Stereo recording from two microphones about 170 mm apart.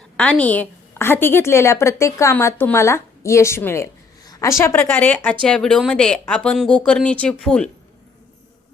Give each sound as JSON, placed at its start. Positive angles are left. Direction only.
{"t": 0.2, "sound": "a woman's voice", "side_deg": 5}